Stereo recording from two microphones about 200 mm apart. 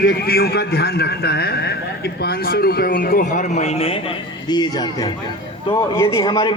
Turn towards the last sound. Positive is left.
turn(degrees=25)  # may be behind; listen again after turning